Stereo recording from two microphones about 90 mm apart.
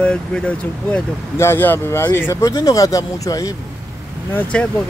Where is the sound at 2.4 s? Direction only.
40° left (ahead or behind).